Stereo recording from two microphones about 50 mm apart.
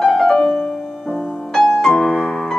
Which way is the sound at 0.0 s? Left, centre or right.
Centre.